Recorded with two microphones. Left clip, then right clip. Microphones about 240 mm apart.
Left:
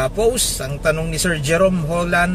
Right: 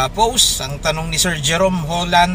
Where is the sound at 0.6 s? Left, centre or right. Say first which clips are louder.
Left 1 dB; centre.